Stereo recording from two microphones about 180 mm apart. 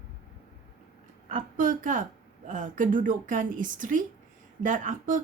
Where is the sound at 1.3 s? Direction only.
45° right (ahead or behind).